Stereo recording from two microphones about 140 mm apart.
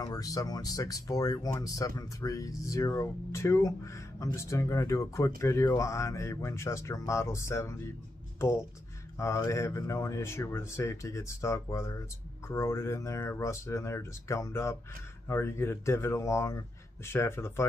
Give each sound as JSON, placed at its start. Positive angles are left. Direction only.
{"t": 0.0, "sound": "speech", "side_deg": 25}
{"t": 9.2, "sound": "speech", "side_deg": 20}